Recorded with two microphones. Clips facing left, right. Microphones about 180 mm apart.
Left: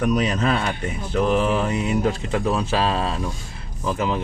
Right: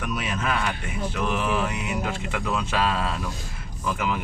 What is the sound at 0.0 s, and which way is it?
Speech, 40° left (ahead or behind).